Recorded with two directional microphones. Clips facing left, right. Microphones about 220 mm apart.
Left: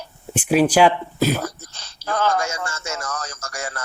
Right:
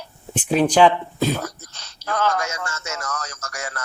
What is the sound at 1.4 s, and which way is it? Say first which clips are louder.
A man's voice: left 2 dB; 30° left (ahead or behind).